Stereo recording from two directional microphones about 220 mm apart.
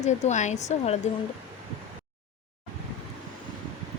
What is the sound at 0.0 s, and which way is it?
Speech, 30° left (ahead or behind).